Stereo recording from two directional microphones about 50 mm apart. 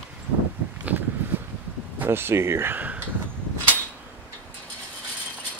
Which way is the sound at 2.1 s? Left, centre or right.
Right.